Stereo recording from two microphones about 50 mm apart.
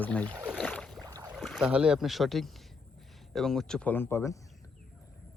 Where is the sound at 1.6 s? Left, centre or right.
Centre.